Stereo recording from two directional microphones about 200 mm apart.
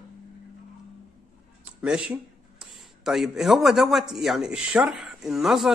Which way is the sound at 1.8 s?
5° right (ahead or behind).